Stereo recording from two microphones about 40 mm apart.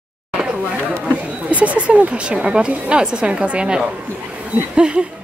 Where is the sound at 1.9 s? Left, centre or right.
Right.